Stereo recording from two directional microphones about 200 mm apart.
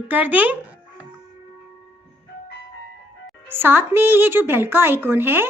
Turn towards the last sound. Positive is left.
turn(degrees=-10)  # may be behind; listen again after turning